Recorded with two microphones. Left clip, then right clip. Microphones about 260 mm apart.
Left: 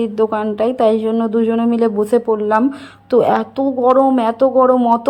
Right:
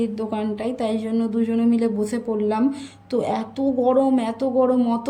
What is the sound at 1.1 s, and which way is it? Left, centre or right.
Speech, left.